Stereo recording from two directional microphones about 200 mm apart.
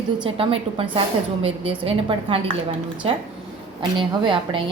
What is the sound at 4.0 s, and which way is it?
Speech, 25° right (ahead or behind).